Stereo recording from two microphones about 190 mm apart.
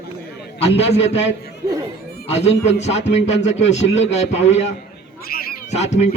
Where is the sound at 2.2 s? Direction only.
35° left (ahead or behind).